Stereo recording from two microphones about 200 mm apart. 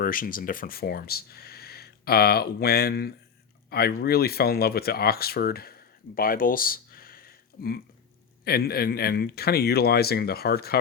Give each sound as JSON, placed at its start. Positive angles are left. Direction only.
{"t": 0.0, "sound": "speech", "side_deg": 45}